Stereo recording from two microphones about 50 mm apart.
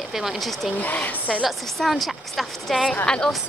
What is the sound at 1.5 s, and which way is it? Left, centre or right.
Speech, centre.